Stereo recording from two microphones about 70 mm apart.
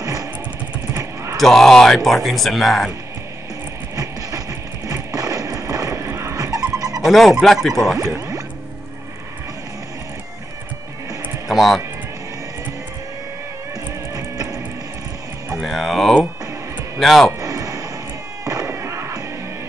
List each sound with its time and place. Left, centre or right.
0.0 s motorcycle: right
1.3 s speech: centre
3.9 s music: right
6.3 s squeal: right
7.0 s speech: centre
11.4 s speech: centre
14.1 s music: right
15.6 s music: centre
17.0 s speech: centre
17.4 s a sound: right
18.4 s fireworks: right
18.7 s fireworks: right